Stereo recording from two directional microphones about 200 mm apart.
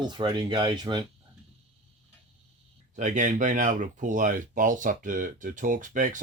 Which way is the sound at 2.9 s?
40° right (ahead or behind).